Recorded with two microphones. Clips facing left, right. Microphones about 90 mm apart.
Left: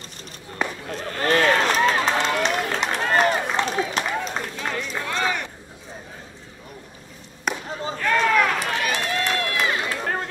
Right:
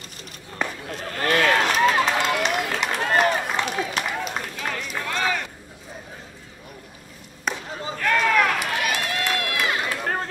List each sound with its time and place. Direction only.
0.8 s run: 35° left (ahead or behind)
7.5 s chop: 5° left (ahead or behind)
7.8 s run: 30° left (ahead or behind)